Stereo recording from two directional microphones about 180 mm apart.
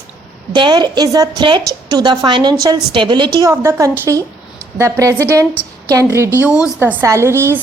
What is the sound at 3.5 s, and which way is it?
A woman's voice, 15° right (ahead or behind).